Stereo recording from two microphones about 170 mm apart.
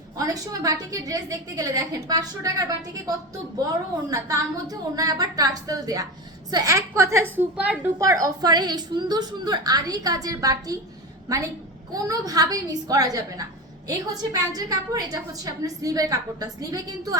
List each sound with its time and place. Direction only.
0.2 s a woman's voice: 20° right (ahead or behind)
4.1 s a woman's voice: 20° right (ahead or behind)
7.9 s a woman's voice: 20° right (ahead or behind)